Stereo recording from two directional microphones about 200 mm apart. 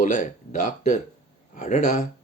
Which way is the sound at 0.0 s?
40° left (ahead or behind).